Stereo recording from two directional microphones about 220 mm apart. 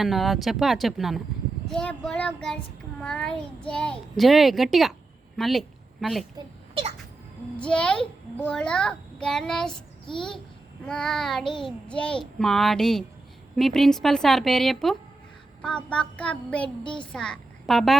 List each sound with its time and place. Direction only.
0.0 s a child's voice: centre (ahead or behind)
6.3 s a sound: 25° right (ahead or behind)
7.5 s a child's voice: 5° left (ahead or behind)
10.8 s a child's voice: 5° left (ahead or behind)
16.8 s a child's voice: 20° left (ahead or behind)
17.1 s a woman's voice: 5° left (ahead or behind)